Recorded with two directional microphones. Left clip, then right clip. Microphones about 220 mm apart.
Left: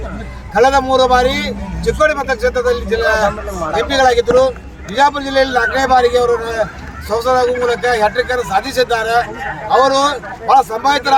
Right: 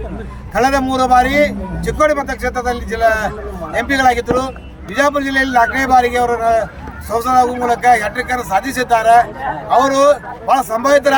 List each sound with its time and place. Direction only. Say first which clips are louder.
0.5 s a man's voice: left 4 dB; 20° right (ahead or behind)